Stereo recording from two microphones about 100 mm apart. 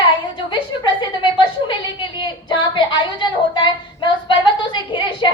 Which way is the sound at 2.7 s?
50° left (ahead or behind).